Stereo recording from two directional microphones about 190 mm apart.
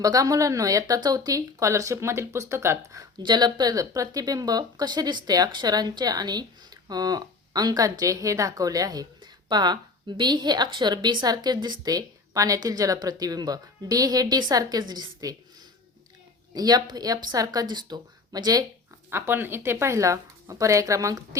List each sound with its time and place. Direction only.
0.0 s speech: 20° right (ahead or behind)
16.6 s a woman's voice: 20° right (ahead or behind)